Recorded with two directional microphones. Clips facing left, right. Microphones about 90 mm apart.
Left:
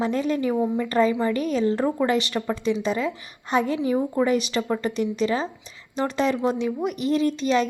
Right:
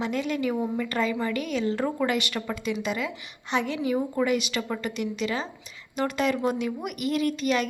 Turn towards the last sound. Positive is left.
turn(degrees=30)  # may be behind; listen again after turning